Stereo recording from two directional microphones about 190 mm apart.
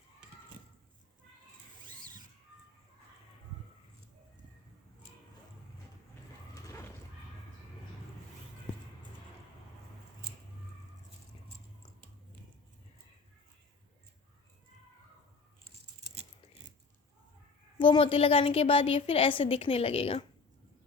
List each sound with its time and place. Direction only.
17.7 s a woman's voice: 25° left (ahead or behind)